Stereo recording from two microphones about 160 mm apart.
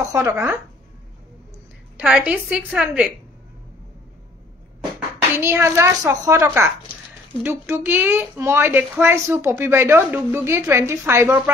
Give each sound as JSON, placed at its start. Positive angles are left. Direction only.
{"t": 0.1, "sound": "a woman's voice", "side_deg": -15}
{"t": 2.0, "sound": "a woman's voice", "side_deg": -10}
{"t": 5.4, "sound": "a woman's voice", "side_deg": -15}